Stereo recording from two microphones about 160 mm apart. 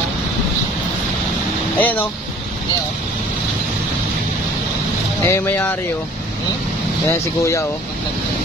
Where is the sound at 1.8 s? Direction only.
10° left (ahead or behind).